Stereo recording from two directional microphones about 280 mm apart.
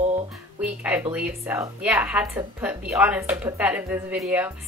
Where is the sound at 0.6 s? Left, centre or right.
Centre.